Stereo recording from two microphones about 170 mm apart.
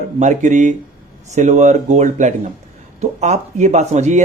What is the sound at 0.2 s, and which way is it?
Speech, 45° right (ahead or behind).